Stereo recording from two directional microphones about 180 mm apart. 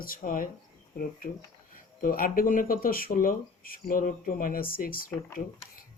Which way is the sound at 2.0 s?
50° left (ahead or behind).